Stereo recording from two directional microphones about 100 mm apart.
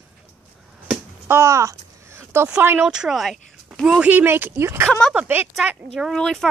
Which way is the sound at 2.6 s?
20° right (ahead or behind).